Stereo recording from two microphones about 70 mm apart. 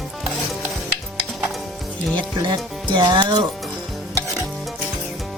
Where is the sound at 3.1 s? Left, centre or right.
Right.